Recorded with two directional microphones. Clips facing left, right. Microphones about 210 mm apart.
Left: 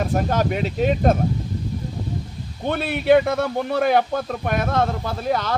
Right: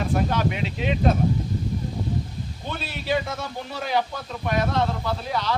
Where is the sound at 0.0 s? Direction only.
45° left (ahead or behind).